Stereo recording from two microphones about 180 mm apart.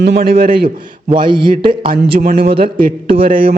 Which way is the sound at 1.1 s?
25° right (ahead or behind).